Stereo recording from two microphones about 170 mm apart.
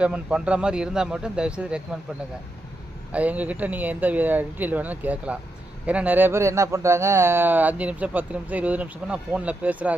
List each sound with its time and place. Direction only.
0.0 s speech: 5° right (ahead or behind)
3.1 s speech: 10° right (ahead or behind)